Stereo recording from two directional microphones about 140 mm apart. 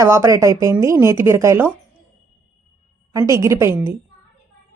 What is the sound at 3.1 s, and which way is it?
Speech, 20° right (ahead or behind).